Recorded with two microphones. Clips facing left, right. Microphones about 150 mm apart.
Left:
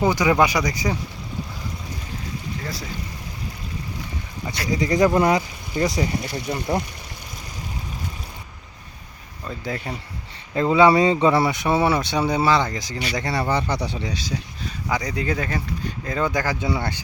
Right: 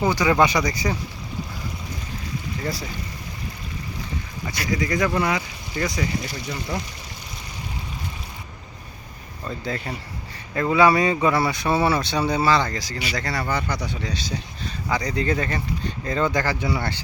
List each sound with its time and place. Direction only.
0.1 s speech: 15° left (ahead or behind)
4.7 s speech: 30° left (ahead or behind)
5.7 s speech: 30° left (ahead or behind)
6.3 s speech: 55° left (ahead or behind)
9.6 s speech: 5° left (ahead or behind)
10.5 s speech: 20° left (ahead or behind)
14.0 s speech: 10° left (ahead or behind)